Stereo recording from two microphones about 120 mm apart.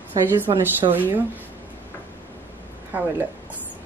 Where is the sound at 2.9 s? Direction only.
15° right (ahead or behind).